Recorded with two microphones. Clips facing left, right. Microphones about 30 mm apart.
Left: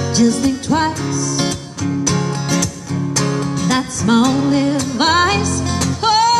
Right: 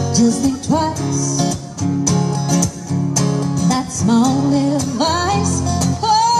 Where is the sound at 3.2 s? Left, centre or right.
Left.